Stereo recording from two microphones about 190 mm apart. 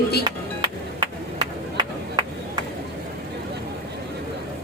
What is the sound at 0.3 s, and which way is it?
Music, 25° right (ahead or behind).